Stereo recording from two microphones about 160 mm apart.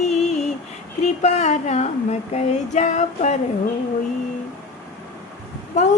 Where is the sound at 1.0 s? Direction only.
45° left (ahead or behind).